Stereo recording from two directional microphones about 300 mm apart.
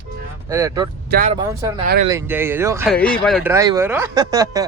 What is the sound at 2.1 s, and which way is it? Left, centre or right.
Speech, centre.